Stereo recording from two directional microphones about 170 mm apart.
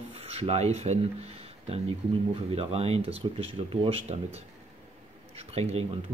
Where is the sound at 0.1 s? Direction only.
35° right (ahead or behind).